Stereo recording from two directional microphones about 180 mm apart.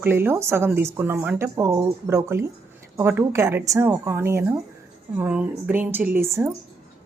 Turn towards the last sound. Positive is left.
turn(degrees=-15)  # may be behind; listen again after turning